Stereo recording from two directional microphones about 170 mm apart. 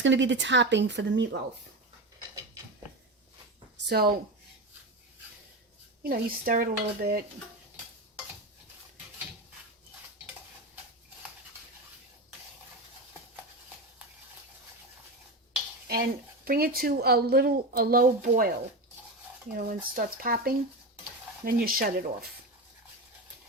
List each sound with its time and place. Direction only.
0.0 s speech: 90° right
3.8 s speech: 65° right (ahead or behind)
6.0 s speech: 60° right (ahead or behind)
15.9 s speech: 60° right (ahead or behind)
19.5 s speech: 55° right (ahead or behind)